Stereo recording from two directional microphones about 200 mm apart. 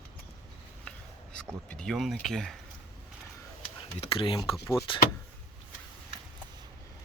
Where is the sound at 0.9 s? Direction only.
5° left (ahead or behind).